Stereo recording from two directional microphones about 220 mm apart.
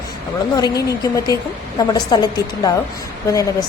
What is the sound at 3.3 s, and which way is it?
Speech, 15° left (ahead or behind).